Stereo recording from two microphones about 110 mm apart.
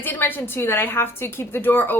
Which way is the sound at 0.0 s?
15° left (ahead or behind).